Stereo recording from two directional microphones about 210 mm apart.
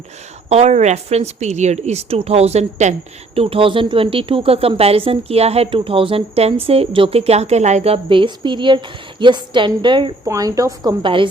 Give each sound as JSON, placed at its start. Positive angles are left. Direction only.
{"t": 0.5, "sound": "a woman's voice", "side_deg": -30}